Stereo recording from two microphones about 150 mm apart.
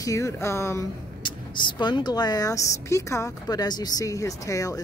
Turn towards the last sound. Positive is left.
turn(degrees=20)  # may be behind; listen again after turning